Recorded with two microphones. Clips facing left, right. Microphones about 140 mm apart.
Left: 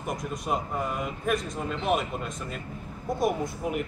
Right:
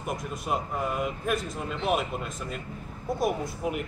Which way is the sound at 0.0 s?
Centre (ahead or behind).